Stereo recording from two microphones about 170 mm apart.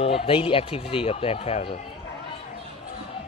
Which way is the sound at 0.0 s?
35° left (ahead or behind).